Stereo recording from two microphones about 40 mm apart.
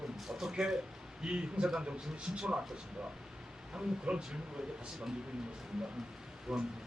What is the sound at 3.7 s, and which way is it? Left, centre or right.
Speech, centre.